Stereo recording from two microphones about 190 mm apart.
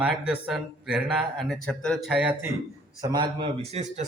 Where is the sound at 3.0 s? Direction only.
25° right (ahead or behind).